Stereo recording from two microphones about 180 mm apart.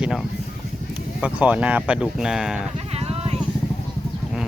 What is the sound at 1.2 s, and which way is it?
Speech, 10° right (ahead or behind).